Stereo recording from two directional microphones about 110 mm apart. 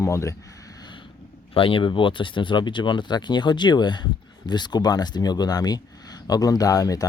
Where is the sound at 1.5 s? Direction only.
55° left (ahead or behind).